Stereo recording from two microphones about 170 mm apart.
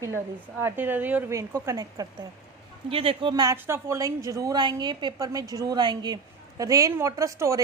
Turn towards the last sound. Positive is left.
turn(degrees=-20)  # may be behind; listen again after turning